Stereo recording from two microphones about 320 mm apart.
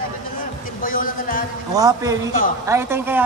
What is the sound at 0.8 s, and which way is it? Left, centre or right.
Speech, left.